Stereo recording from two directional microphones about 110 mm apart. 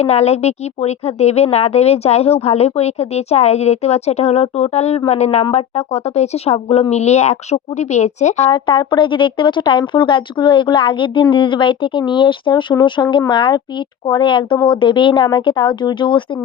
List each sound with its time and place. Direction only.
0.0 s a woman's voice: 75° left (ahead or behind)
6.9 s a woman's voice: 80° left
8.4 s speech: 50° left (ahead or behind)